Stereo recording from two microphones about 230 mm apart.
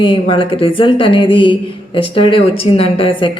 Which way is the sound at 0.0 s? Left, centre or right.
Left.